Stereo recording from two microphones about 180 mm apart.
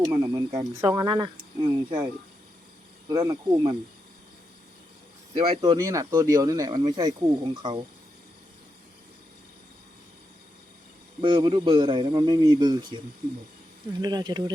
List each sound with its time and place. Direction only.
0.1 s a man's voice: 20° right (ahead or behind)
3.1 s a man's voice: 25° right (ahead or behind)
5.3 s a man's voice: 35° right (ahead or behind)
11.2 s a man's voice: 30° right (ahead or behind)
14.0 s a man's voice: 25° right (ahead or behind)